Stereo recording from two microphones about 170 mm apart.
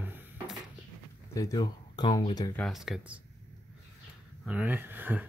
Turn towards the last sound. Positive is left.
turn(degrees=-10)  # may be behind; listen again after turning